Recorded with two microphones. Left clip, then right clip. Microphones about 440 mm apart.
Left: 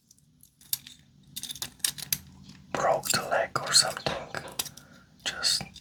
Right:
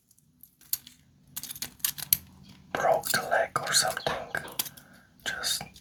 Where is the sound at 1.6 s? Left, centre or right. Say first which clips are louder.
Left 1 dB; left.